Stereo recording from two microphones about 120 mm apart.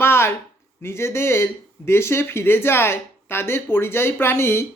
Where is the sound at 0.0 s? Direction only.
20° left (ahead or behind).